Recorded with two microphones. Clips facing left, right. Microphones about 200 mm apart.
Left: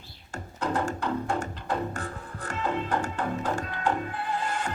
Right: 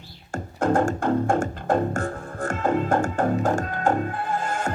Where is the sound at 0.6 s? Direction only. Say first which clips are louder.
Right 7 dB; 50° right (ahead or behind).